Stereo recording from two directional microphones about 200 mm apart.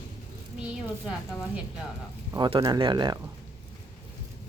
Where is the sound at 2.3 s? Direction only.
20° right (ahead or behind).